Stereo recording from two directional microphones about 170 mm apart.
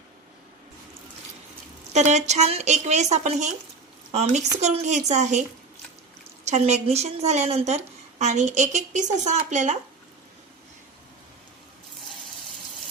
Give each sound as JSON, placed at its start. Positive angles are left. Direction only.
{"t": 1.9, "sound": "a woman's voice", "side_deg": -45}
{"t": 6.4, "sound": "a woman's voice", "side_deg": -40}